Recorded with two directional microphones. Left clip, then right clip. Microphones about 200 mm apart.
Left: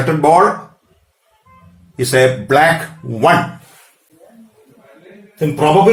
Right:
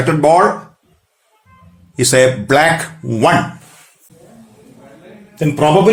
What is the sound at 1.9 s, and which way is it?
Speech, 50° right (ahead or behind).